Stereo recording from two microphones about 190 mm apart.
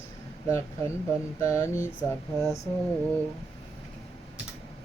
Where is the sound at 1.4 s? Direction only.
15° left (ahead or behind).